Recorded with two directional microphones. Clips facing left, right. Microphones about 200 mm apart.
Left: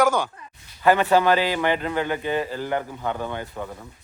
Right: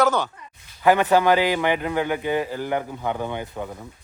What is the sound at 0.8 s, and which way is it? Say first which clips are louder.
Speech: right 1 dB; 15° right (ahead or behind).